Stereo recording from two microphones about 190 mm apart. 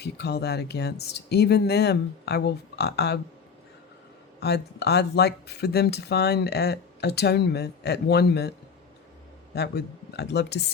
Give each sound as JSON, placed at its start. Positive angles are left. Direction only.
{"t": 0.0, "sound": "speech", "side_deg": 60}
{"t": 4.4, "sound": "speech", "side_deg": 60}
{"t": 9.6, "sound": "speech", "side_deg": 60}